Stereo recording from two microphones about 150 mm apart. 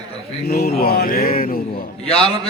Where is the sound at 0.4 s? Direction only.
90° left; by 1.5 s 70° left (ahead or behind).